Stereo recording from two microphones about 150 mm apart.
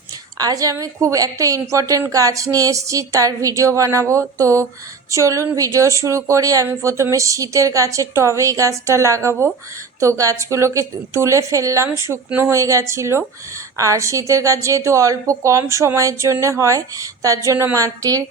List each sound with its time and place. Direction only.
0.3 s a woman's voice: 25° right (ahead or behind)